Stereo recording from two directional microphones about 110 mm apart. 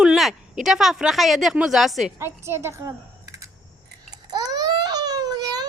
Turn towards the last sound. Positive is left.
turn(degrees=-35)  # may be behind; listen again after turning